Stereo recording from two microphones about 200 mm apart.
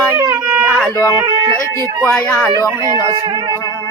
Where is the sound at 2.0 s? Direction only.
10° left (ahead or behind).